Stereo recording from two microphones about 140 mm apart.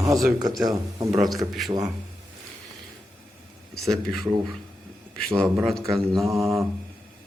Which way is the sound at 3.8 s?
Centre (ahead or behind).